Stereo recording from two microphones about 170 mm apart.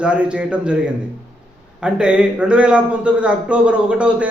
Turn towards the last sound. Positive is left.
turn(degrees=-5)  # may be behind; listen again after turning